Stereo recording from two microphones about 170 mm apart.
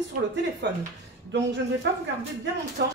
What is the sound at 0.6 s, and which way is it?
Speech, 90° right.